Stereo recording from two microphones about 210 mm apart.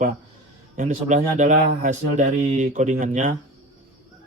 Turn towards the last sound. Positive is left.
turn(degrees=-35)  # may be behind; listen again after turning